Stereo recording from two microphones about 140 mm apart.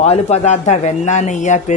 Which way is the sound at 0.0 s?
50° left (ahead or behind).